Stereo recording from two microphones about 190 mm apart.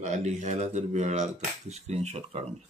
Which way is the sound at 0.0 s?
40° right (ahead or behind).